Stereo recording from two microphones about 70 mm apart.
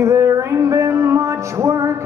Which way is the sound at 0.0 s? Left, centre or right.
Right.